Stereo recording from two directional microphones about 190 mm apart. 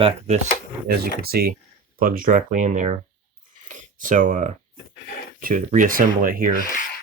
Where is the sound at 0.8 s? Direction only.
55° right (ahead or behind).